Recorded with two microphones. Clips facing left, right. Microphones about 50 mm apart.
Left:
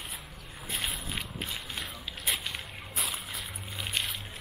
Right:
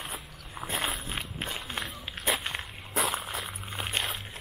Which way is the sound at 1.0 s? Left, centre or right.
Right.